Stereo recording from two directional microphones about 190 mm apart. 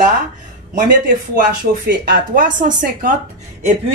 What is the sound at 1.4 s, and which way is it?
Speech, 55° right (ahead or behind).